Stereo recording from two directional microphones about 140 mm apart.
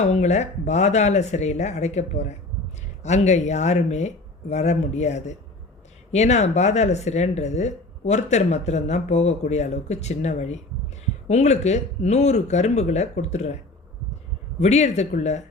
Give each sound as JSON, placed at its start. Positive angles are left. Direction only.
{"t": 0.0, "sound": "speech", "side_deg": 55}
{"t": 14.6, "sound": "speech", "side_deg": 55}